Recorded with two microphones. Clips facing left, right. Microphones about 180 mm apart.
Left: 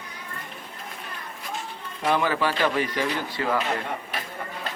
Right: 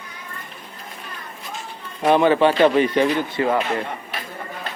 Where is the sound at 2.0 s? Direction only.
25° right (ahead or behind).